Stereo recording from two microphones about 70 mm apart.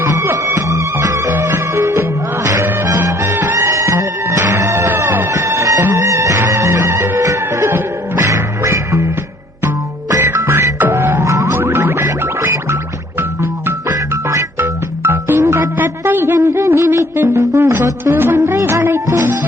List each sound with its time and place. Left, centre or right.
0.1 s music: right
1.3 s music: right
3.7 s music: right
7.2 s music: right
8.6 s music: right
10.2 s music: right
13.1 s organ: right
14.6 s music: right